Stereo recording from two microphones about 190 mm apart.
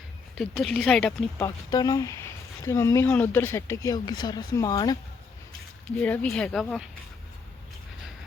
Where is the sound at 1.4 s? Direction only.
20° left (ahead or behind).